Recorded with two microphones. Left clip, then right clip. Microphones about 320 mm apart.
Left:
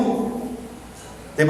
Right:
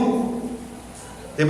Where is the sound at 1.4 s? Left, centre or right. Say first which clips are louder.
Left 3 dB; left.